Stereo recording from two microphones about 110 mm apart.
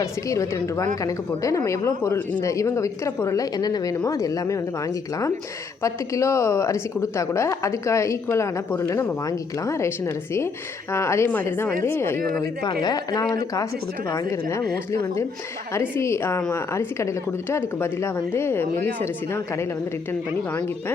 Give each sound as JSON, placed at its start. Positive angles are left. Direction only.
{"t": 0.0, "sound": "a woman's voice", "side_deg": 30}
{"t": 5.8, "sound": "a woman's voice", "side_deg": 25}
{"t": 10.9, "sound": "a woman's voice", "side_deg": 25}
{"t": 12.6, "sound": "a woman's voice", "side_deg": 35}
{"t": 15.7, "sound": "a woman's voice", "side_deg": 25}